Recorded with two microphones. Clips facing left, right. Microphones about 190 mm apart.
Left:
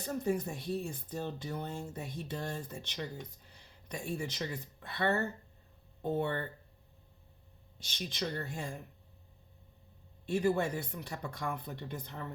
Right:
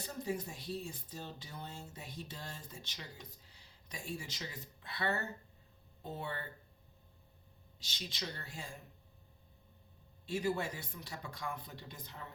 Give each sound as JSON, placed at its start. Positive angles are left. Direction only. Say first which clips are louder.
{"t": 0.0, "sound": "speech", "louder": "left 6 dB", "side_deg": 55}
{"t": 8.1, "sound": "speech", "louder": "left 9 dB", "side_deg": 50}
{"t": 10.2, "sound": "speech", "louder": "left 6 dB", "side_deg": 55}